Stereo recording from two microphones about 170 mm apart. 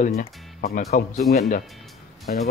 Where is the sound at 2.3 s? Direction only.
55° left (ahead or behind).